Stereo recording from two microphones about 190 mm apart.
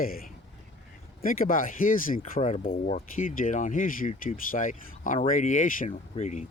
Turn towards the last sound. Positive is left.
turn(degrees=35)  # may be behind; listen again after turning